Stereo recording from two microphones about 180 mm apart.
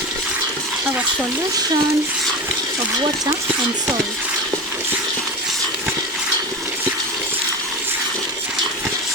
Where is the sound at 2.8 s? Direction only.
20° right (ahead or behind).